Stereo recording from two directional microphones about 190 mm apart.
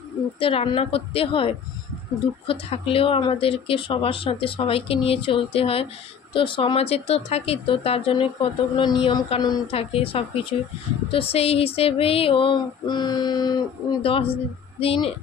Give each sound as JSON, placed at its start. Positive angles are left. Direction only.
{"t": 0.4, "sound": "speech", "side_deg": 30}